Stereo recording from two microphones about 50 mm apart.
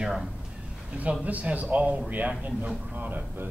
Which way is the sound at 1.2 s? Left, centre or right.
Right.